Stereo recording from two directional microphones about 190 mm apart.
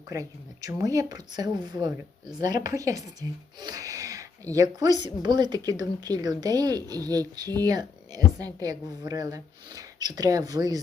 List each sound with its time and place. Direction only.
0.1 s speech: 15° right (ahead or behind)